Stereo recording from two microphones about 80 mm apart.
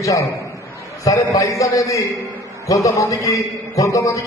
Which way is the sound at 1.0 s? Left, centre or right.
Left.